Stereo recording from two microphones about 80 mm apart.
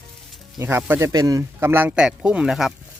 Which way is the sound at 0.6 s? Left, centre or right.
Right.